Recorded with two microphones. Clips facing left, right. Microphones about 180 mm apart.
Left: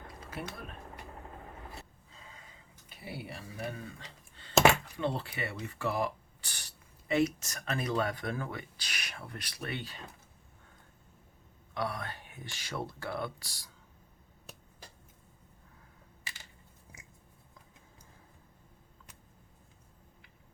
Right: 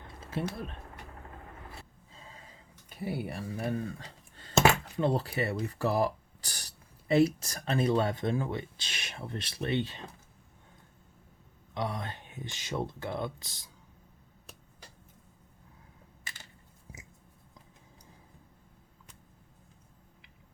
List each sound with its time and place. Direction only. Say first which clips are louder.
0.3 s speech: right 7 dB; 30° right (ahead or behind)
2.1 s gasp: right 3 dB; 30° right (ahead or behind)
2.9 s speech: right 8 dB; 45° right (ahead or behind)
4.0 s clicking: right 2 dB; 40° right (ahead or behind)
4.9 s speech: right 5 dB; 40° right (ahead or behind)
11.7 s speech: right 1 dB; 20° right (ahead or behind)